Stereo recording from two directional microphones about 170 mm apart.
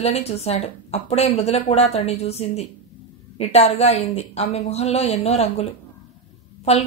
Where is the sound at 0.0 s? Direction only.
40° left (ahead or behind).